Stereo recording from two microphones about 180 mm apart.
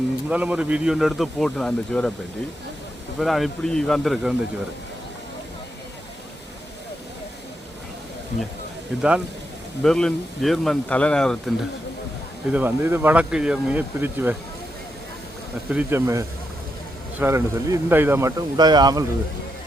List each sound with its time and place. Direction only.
0.3 s a man's voice: 10° right (ahead or behind)
3.2 s a man's voice: centre (ahead or behind)
9.0 s a man's voice: 5° right (ahead or behind)
12.5 s speech: 10° right (ahead or behind)
15.7 s speech: 10° right (ahead or behind)